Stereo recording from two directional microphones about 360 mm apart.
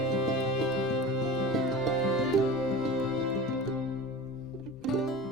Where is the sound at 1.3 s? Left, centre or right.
Centre.